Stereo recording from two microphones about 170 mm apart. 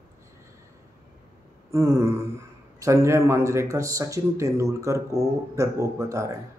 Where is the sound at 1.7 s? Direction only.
15° right (ahead or behind).